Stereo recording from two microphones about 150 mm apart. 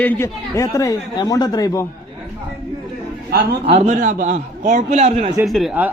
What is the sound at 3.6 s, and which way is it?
Speech, 45° right (ahead or behind).